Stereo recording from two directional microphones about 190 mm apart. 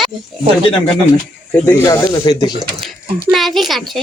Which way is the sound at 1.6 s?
15° left (ahead or behind).